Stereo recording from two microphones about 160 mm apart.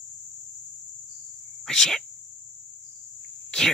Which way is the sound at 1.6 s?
Centre (ahead or behind).